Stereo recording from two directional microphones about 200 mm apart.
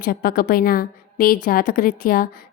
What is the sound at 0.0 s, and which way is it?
A woman's voice, 50° left (ahead or behind).